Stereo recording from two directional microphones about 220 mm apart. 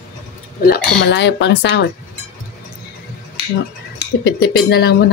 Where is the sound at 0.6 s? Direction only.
45° left (ahead or behind).